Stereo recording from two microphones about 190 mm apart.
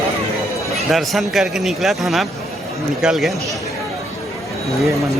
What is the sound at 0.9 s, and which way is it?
A man's voice, centre (ahead or behind).